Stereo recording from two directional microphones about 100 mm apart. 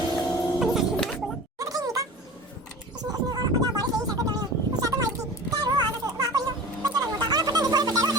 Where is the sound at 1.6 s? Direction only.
35° right (ahead or behind).